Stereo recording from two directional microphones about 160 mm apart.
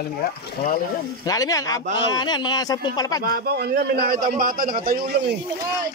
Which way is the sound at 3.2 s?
70° right (ahead or behind).